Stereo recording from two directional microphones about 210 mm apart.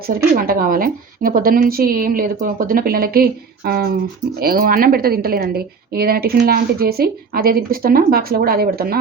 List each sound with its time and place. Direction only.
0.0 s a woman's voice: 45° right (ahead or behind)